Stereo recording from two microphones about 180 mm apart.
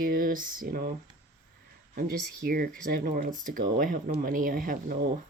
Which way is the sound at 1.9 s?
55° right (ahead or behind).